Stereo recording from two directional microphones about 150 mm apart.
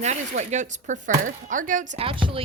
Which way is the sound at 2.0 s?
35° right (ahead or behind).